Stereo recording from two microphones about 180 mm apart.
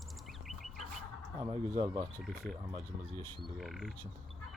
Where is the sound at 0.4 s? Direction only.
Centre (ahead or behind).